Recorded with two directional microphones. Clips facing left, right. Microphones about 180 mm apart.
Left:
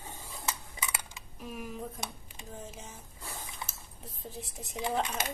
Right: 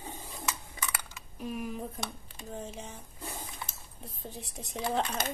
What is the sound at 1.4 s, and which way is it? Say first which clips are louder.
Speech: right 4 dB; centre (ahead or behind).